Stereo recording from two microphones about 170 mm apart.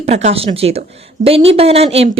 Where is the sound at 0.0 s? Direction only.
40° right (ahead or behind).